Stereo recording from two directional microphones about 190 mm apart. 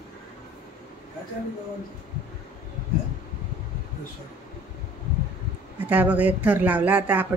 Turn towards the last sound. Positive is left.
turn(degrees=-10)  # may be behind; listen again after turning